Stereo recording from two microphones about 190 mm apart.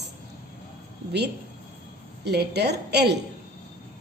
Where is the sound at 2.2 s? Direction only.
60° right (ahead or behind).